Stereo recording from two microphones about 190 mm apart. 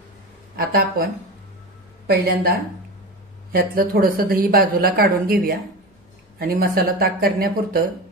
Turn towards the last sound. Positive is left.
turn(degrees=-55)  # may be behind; listen again after turning